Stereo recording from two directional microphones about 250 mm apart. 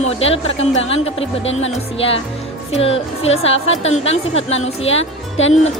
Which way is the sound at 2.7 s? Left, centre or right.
Left.